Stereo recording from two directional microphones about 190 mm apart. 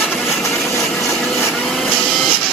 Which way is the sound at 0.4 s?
15° left (ahead or behind).